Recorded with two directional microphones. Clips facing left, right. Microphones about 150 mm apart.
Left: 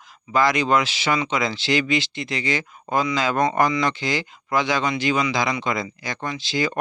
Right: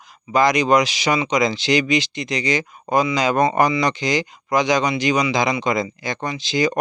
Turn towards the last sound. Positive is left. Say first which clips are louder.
# right 4 dB
turn(degrees=-20)  # may be behind; listen again after turning